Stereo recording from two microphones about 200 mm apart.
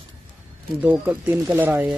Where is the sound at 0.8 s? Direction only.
10° right (ahead or behind).